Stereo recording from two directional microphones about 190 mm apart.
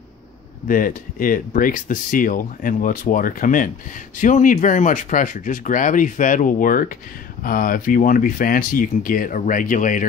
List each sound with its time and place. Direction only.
0.7 s speech: 45° left (ahead or behind)